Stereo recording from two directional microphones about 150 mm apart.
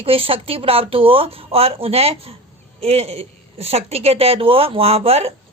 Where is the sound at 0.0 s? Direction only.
40° right (ahead or behind).